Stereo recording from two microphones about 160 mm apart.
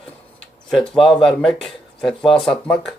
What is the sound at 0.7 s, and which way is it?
A man's voice, centre (ahead or behind).